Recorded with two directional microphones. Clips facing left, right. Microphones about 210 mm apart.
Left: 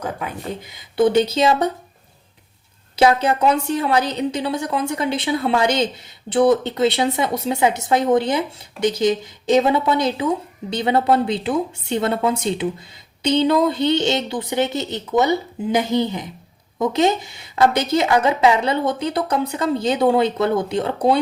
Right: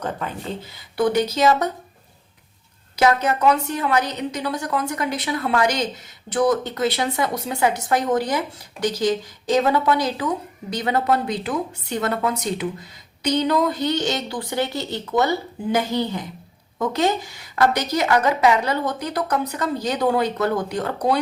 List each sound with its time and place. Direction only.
0.0 s speech: 10° left (ahead or behind); by 1.7 s 30° left (ahead or behind)
2.9 s speech: 30° left (ahead or behind)